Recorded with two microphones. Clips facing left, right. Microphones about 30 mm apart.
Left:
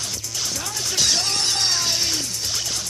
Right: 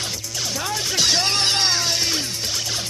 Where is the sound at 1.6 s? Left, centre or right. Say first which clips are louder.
Right 1 dB; centre.